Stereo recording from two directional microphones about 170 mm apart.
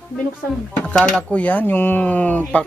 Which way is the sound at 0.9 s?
5° left (ahead or behind).